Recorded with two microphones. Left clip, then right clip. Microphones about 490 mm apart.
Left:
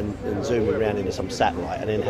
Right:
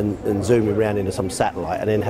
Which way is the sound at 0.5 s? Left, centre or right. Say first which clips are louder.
Right 3 dB; right.